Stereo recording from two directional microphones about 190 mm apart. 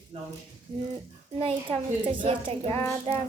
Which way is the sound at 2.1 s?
30° right (ahead or behind).